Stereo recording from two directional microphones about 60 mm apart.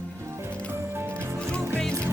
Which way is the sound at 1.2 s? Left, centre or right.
Right.